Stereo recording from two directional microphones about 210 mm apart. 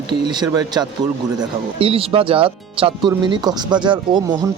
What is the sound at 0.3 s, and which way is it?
Speech, 20° right (ahead or behind).